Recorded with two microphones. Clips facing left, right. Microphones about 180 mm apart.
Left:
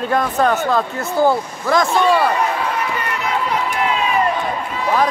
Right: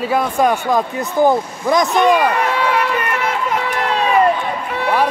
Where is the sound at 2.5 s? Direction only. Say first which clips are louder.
Right 4 dB; 80° right.